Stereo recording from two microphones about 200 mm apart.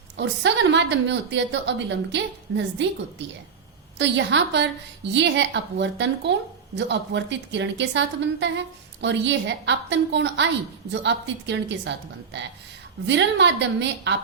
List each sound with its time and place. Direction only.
0.2 s a woman's voice: 60° right (ahead or behind)
3.9 s a woman's voice: 60° right (ahead or behind)